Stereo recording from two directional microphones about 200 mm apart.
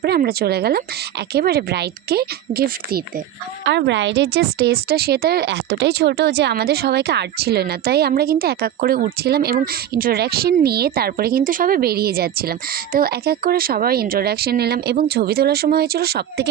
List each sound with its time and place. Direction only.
0.0 s a woman's voice: 50° right (ahead or behind)
3.6 s a woman's voice: 60° right (ahead or behind)